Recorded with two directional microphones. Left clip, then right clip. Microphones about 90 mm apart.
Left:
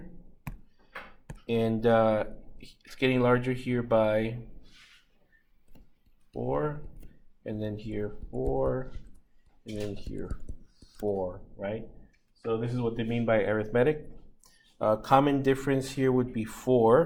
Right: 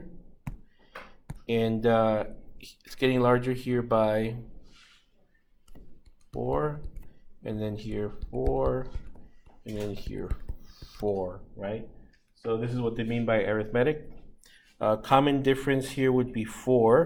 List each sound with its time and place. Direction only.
0.4 s neigh: 5° right (ahead or behind)
1.5 s speech: 10° right (ahead or behind); by 4.4 s 35° right (ahead or behind)
7.4 s speech: 35° right (ahead or behind)
11.2 s speech: 5° right (ahead or behind)
14.8 s speech: 10° right (ahead or behind)